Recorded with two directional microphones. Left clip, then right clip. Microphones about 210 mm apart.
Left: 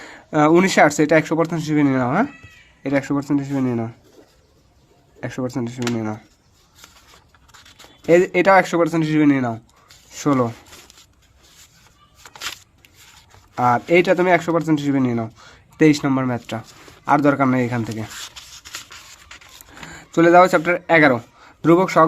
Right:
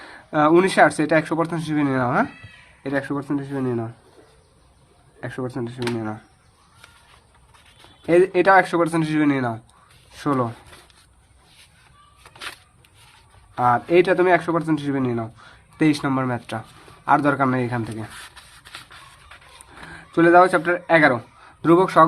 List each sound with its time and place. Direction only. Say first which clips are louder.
0.0 s speech: left 2 dB; 50° left (ahead or behind)
5.2 s speech: left 3 dB; 50° left (ahead or behind)
8.0 s speech: left 2 dB; 50° left (ahead or behind)
13.6 s speech: left 1 dB; 50° left (ahead or behind)
17.1 s a sound: left 2 dB; 45° left (ahead or behind)
19.8 s speech: left 2 dB; 50° left (ahead or behind)